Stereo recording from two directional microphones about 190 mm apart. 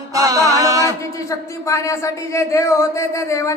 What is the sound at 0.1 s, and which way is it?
Music, 15° right (ahead or behind).